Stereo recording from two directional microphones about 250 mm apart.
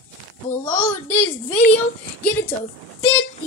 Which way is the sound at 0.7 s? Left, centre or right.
Centre.